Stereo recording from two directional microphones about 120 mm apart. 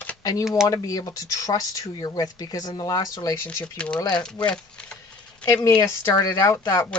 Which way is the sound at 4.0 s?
35° left (ahead or behind).